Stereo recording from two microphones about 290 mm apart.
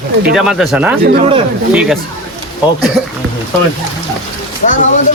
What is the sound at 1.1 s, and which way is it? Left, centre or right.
Speech, right.